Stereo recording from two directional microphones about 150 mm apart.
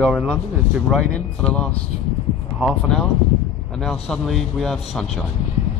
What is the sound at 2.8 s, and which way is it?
Speech, 5° left (ahead or behind).